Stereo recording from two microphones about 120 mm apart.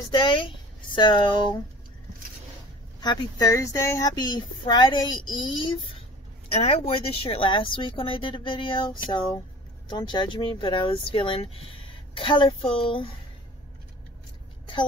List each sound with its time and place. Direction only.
0.1 s speech: 45° left (ahead or behind)
3.0 s speech: 35° left (ahead or behind)
6.5 s a woman's voice: 55° left (ahead or behind)